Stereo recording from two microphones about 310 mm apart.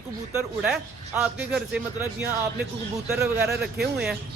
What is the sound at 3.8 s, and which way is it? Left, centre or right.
Speech, centre.